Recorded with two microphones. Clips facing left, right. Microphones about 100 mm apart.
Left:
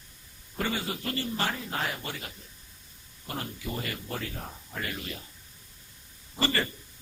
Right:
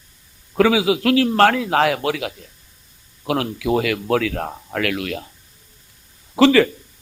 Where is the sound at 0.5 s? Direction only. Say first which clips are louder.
Right 16 dB; 90° right.